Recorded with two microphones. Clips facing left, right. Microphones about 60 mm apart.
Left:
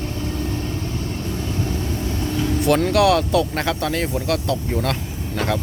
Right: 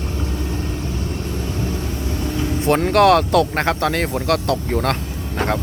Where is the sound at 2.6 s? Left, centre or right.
Right.